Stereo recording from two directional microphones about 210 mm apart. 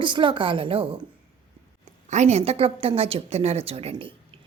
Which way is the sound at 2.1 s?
30° right (ahead or behind).